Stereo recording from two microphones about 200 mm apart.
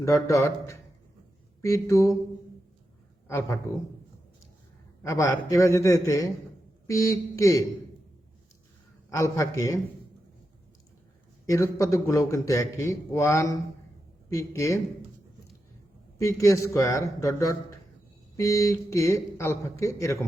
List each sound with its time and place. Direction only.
0.0 s a man's voice: 15° left (ahead or behind)
3.2 s a man's voice: 15° left (ahead or behind)
5.0 s a man's voice: 15° left (ahead or behind)
9.0 s a man's voice: 15° left (ahead or behind)
11.4 s a man's voice: 15° left (ahead or behind)
16.1 s a man's voice: 15° left (ahead or behind)